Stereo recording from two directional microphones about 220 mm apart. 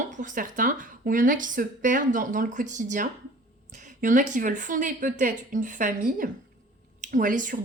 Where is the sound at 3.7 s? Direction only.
35° right (ahead or behind).